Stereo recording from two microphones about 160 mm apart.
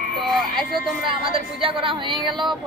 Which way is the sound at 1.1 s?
35° right (ahead or behind).